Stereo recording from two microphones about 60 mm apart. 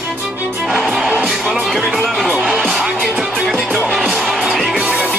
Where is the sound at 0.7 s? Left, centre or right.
Centre.